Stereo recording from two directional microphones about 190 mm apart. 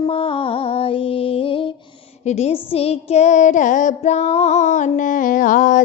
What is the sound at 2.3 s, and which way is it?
Child singing, 35° left (ahead or behind).